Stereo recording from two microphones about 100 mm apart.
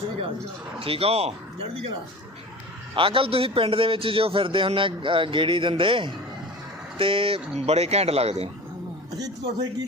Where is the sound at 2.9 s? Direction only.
60° right (ahead or behind); by 8.5 s 90° right.